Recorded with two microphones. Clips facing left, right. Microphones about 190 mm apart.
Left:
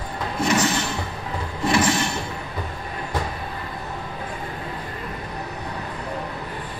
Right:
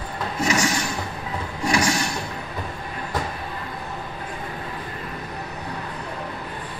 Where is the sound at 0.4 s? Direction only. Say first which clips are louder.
Left 2 dB; 10° right (ahead or behind).